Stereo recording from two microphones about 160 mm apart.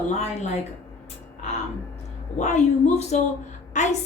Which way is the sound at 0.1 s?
45° left (ahead or behind).